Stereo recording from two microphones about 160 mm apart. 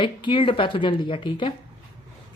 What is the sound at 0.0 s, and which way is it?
Speech, 30° left (ahead or behind).